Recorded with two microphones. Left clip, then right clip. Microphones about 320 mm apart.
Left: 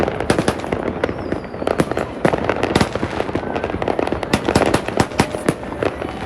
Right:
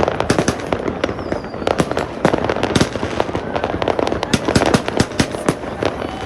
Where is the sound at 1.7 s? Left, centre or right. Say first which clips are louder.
Right 1 dB; centre.